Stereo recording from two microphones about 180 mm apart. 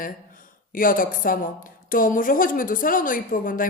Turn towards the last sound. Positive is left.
turn(degrees=50)  # may be behind; listen again after turning